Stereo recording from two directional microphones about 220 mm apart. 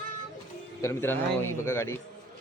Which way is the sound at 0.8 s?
10° left (ahead or behind).